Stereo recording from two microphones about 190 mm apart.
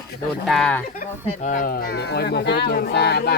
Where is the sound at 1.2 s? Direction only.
40° left (ahead or behind).